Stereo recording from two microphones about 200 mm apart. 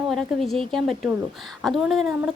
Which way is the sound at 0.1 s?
Centre (ahead or behind).